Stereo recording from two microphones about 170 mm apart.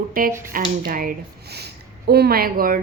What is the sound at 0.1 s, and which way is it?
A woman's voice, 55° right (ahead or behind).